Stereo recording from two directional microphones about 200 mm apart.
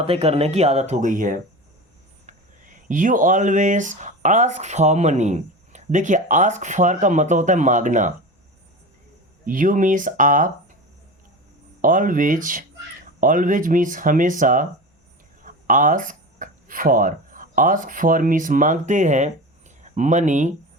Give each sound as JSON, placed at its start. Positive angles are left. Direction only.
{"t": 0.0, "sound": "speech", "side_deg": -30}
{"t": 2.2, "sound": "a sound", "side_deg": -40}
{"t": 2.9, "sound": "speech", "side_deg": -40}
{"t": 9.5, "sound": "speech", "side_deg": -40}
{"t": 11.8, "sound": "speech", "side_deg": -40}